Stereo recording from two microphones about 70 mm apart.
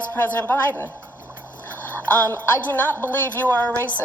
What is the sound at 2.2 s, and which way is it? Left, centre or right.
A woman's voice, left.